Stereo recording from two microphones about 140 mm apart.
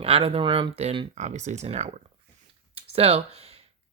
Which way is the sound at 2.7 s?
45° right (ahead or behind).